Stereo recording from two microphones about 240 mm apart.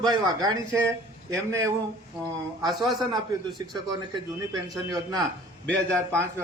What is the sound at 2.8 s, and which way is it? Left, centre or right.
Speech, centre.